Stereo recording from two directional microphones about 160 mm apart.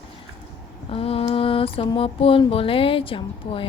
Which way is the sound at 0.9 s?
35° left (ahead or behind).